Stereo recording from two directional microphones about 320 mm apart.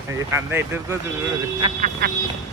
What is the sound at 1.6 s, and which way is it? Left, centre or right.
Speech, right.